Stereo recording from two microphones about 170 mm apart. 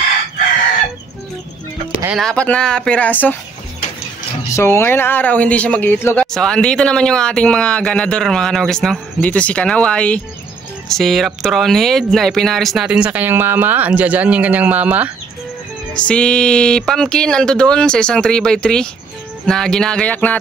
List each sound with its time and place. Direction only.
2.1 s speech: 5° left (ahead or behind)
4.5 s speech: 15° left (ahead or behind); by 15.0 s 10° right (ahead or behind)
15.9 s speech: 5° left (ahead or behind)